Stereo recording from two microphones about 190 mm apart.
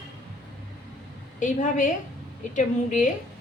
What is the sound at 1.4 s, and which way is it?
A woman's voice, 40° left (ahead or behind).